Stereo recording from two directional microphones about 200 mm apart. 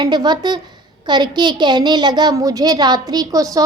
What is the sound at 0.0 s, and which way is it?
A woman's voice, 20° right (ahead or behind).